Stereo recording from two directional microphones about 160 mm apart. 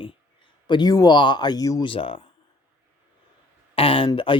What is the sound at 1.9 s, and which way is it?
Speech, 35° left (ahead or behind).